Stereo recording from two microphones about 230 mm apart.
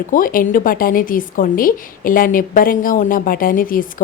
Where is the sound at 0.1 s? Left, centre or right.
Left.